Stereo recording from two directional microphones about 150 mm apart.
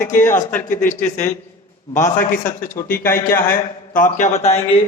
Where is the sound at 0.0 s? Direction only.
60° left (ahead or behind).